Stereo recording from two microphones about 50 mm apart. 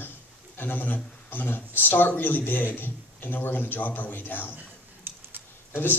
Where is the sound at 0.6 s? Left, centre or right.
Left.